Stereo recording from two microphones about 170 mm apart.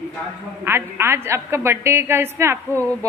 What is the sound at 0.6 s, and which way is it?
A woman's voice, 15° right (ahead or behind).